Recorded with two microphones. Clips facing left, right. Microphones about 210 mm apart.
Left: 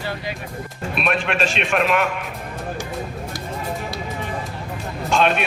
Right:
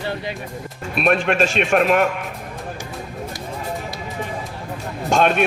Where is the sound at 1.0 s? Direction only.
45° right (ahead or behind).